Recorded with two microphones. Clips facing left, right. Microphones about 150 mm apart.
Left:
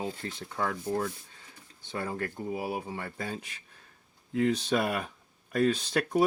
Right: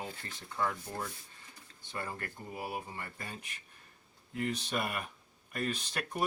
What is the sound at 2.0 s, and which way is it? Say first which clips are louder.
Speech: left 7 dB; 90° left.